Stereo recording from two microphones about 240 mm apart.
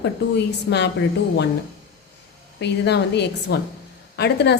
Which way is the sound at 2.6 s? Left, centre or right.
Left.